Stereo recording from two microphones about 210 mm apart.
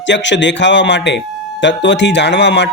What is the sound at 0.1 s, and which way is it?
Speech, 60° left (ahead or behind).